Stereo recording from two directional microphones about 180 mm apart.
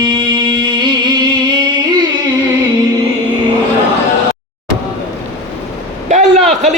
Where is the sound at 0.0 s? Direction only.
25° right (ahead or behind).